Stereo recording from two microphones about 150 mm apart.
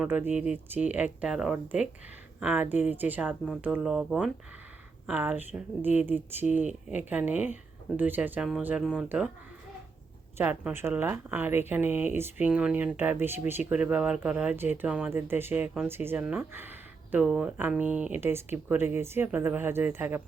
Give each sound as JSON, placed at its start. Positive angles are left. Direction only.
{"t": 0.0, "sound": "speech", "side_deg": -10}
{"t": 10.3, "sound": "speech", "side_deg": -10}